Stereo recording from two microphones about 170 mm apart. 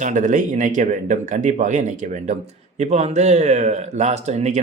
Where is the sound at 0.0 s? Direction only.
45° right (ahead or behind).